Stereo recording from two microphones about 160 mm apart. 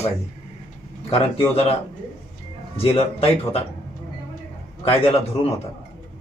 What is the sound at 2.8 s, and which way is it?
Speech, 35° left (ahead or behind).